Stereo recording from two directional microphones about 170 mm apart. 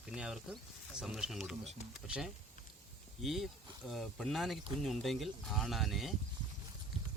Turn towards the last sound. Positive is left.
turn(degrees=0)  # may be behind; listen again after turning